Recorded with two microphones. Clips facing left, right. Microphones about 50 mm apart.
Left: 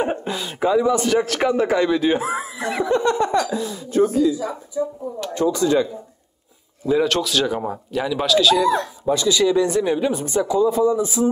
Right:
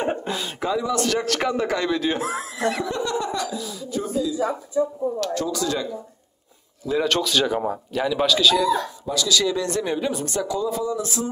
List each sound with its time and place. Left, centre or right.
0.0 s a sound: centre
0.6 s speech: centre
3.0 s speech: left
5.2 s speech: left
6.9 s speech: centre
9.0 s speech: left
9.4 s speech: centre